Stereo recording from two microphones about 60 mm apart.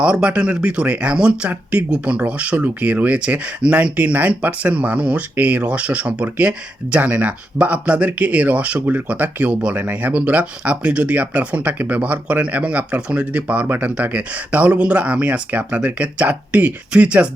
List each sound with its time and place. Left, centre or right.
0.0 s speech: centre
13.7 s speech: right